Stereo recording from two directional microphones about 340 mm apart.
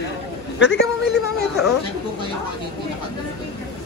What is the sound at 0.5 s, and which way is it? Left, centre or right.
Speech, left.